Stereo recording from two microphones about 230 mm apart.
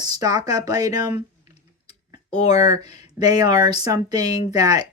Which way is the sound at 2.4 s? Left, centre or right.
Left.